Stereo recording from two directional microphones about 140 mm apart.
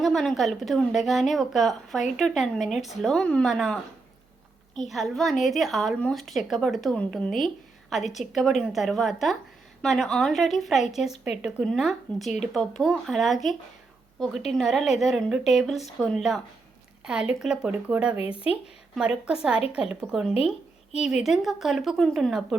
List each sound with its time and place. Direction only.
0.0 s a woman's voice: centre (ahead or behind)
4.9 s a woman's voice: centre (ahead or behind)
18.2 s speech: 40° left (ahead or behind)
18.9 s a woman's voice: 5° right (ahead or behind)